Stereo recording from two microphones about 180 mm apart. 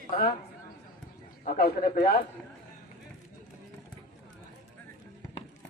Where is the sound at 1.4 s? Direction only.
55° left (ahead or behind).